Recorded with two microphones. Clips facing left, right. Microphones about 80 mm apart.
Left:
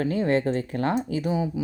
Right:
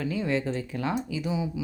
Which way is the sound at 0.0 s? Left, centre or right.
Left.